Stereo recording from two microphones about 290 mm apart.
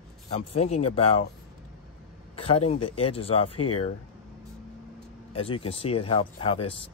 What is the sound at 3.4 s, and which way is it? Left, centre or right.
Speech, left.